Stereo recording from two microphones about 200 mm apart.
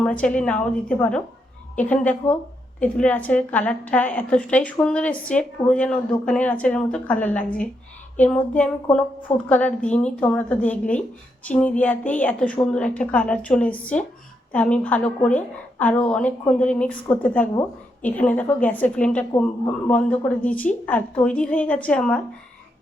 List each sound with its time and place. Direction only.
0.0 s a woman's voice: 5° left (ahead or behind)